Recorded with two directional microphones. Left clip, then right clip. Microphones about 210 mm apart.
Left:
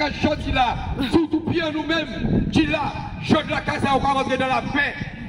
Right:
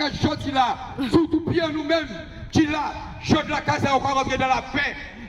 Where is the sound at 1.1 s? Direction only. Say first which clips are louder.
Right 1 dB; 50° left (ahead or behind).